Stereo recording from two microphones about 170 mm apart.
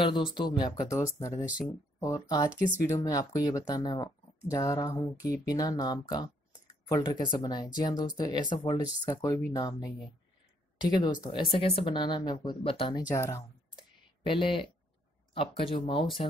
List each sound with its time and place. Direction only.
0.0 s speech: 30° left (ahead or behind)
1.4 s speech: 10° right (ahead or behind)
2.0 s speech: 20° left (ahead or behind)
11.0 s speech: 25° left (ahead or behind)
13.1 s speech: 20° left (ahead or behind)
14.2 s speech: 30° left (ahead or behind)